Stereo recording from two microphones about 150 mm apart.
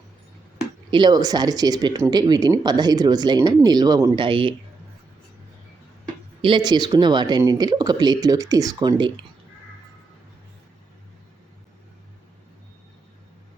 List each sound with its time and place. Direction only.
0.9 s speech: 30° right (ahead or behind)
6.4 s speech: 30° right (ahead or behind)